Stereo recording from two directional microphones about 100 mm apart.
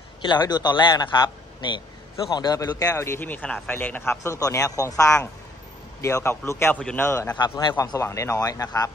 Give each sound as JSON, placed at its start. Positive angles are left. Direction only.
{"t": 0.2, "sound": "a man's voice", "side_deg": 45}
{"t": 2.9, "sound": "speech", "side_deg": 20}
{"t": 6.7, "sound": "a man's voice", "side_deg": 10}
{"t": 7.0, "sound": "speech", "side_deg": 30}
{"t": 7.3, "sound": "speech", "side_deg": 45}